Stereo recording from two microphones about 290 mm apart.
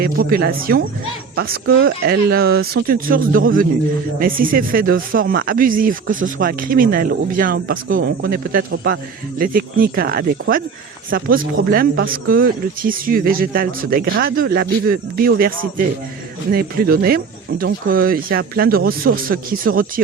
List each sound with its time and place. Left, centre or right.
0.0 s speech: right